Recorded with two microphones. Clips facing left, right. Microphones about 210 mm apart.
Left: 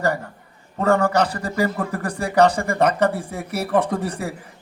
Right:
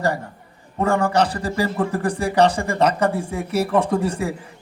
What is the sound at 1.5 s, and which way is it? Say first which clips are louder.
Speech: right 1 dB; 30° right (ahead or behind).